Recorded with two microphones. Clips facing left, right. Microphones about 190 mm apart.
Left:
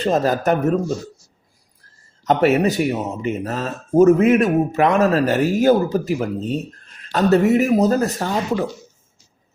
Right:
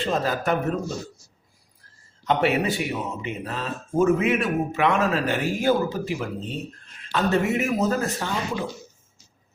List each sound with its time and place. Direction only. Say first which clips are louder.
0.0 s a man's voice: left 6 dB; 40° left (ahead or behind)
2.2 s speech: left 6 dB; 45° left (ahead or behind)